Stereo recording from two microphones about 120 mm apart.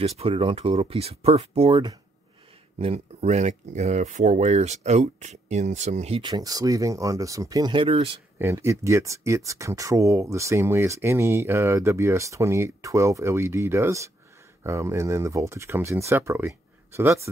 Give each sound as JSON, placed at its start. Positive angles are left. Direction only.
{"t": 0.0, "sound": "speech", "side_deg": -55}
{"t": 2.8, "sound": "speech", "side_deg": -65}
{"t": 6.3, "sound": "speech", "side_deg": -30}
{"t": 7.7, "sound": "speech", "side_deg": -50}
{"t": 8.4, "sound": "speech", "side_deg": -25}